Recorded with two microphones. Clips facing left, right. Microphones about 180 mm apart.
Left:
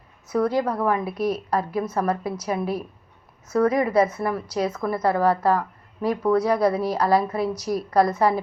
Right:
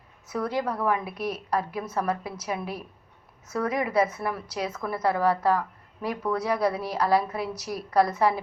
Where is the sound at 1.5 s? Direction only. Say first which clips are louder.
Left 4 dB; 45° left (ahead or behind).